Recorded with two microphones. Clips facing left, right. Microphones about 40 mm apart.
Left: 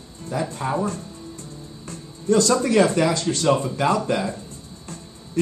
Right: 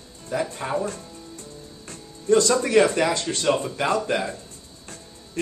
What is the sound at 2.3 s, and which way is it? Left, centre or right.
Speech, right.